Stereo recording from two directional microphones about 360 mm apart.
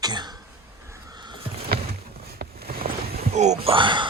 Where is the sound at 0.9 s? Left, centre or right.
Centre.